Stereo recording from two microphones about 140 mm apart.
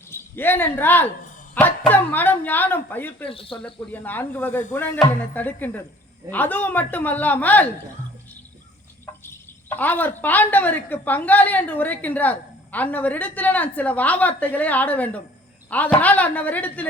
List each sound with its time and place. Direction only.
0.1 s a woman's voice: 15° left (ahead or behind)
3.2 s speech: 40° left (ahead or behind)
3.9 s a woman's voice: 15° left (ahead or behind)
9.2 s a woman's voice: 15° left (ahead or behind)